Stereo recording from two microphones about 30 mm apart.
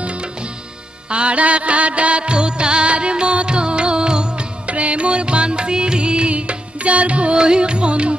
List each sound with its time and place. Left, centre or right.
1.1 s music: right
4.6 s music: right
7.3 s music: right